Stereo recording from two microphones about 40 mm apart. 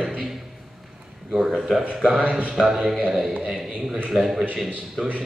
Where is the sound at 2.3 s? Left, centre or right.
Right.